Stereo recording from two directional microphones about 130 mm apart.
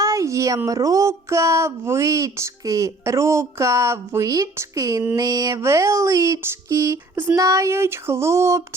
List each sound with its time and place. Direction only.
0.0 s speech: 25° right (ahead or behind)